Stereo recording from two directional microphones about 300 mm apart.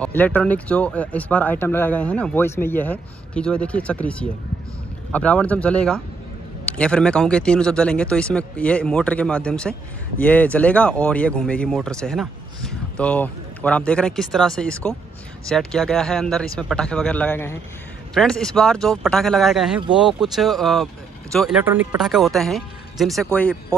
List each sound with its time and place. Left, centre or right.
0.0 s speech: centre